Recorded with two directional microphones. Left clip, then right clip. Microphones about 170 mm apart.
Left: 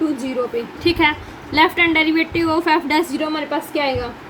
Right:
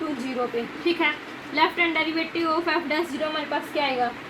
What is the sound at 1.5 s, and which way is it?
A woman's voice, 90° left.